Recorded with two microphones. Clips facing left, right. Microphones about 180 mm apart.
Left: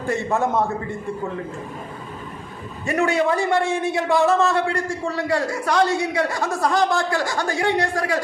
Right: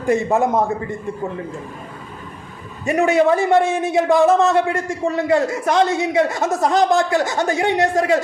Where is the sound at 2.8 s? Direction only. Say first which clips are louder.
Right 5 dB; 20° right (ahead or behind).